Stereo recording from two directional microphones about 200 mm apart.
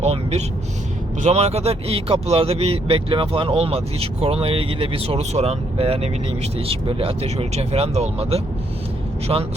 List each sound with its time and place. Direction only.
0.0 s vehicle: 30° right (ahead or behind)
1.2 s speech: 30° right (ahead or behind)